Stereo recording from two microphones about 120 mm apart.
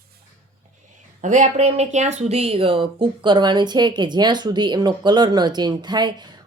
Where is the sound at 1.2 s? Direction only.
90° right.